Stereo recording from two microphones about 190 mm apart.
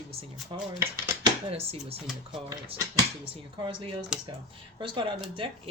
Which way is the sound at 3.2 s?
25° right (ahead or behind).